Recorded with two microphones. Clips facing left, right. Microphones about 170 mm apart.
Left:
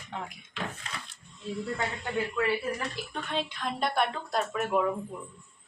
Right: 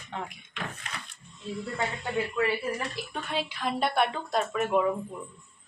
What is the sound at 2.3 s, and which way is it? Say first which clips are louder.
Speech: even; 10° right (ahead or behind).